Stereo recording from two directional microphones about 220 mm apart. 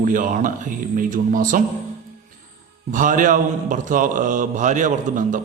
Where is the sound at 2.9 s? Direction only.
35° right (ahead or behind).